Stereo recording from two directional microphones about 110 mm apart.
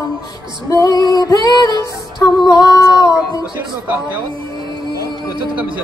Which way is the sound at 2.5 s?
35° left (ahead or behind).